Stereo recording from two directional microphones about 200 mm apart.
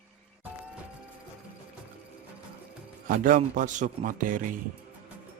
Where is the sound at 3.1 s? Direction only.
40° right (ahead or behind).